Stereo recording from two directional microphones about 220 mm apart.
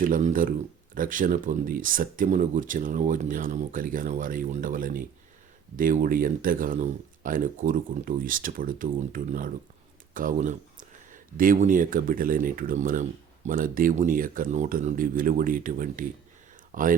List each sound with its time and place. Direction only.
0.0 s speech: 35° right (ahead or behind)